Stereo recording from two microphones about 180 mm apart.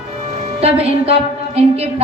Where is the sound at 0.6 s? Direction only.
35° right (ahead or behind).